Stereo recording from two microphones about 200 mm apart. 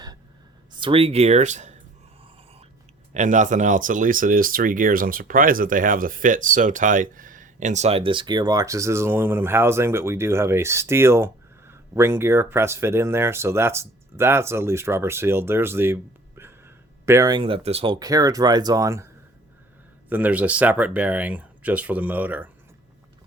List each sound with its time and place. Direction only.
0.7 s speech: 25° right (ahead or behind)
3.2 s speech: 40° right (ahead or behind)
18.0 s speech: 15° right (ahead or behind)
20.1 s speech: 10° right (ahead or behind)